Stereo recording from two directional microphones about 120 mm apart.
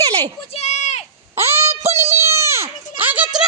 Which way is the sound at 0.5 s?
65° left (ahead or behind).